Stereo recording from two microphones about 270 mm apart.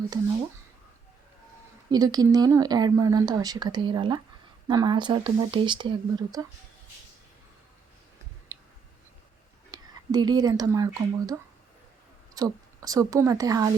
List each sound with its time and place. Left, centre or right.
1.9 s speech: centre
8.5 s tick: centre
9.7 s speech: centre